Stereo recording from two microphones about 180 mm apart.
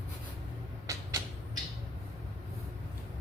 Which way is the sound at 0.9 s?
20° right (ahead or behind).